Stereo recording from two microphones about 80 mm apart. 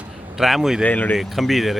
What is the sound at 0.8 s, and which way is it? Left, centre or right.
Speech, centre.